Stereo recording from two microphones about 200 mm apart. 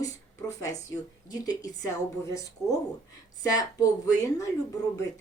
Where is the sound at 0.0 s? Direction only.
15° left (ahead or behind).